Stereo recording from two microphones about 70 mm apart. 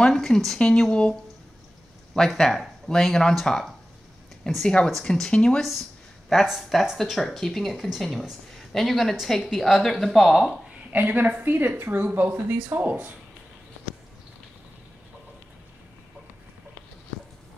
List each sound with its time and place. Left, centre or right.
0.0 s speech: centre
2.1 s speech: centre
4.6 s speech: centre
5.7 s speech: centre
10.9 s a woman's voice: right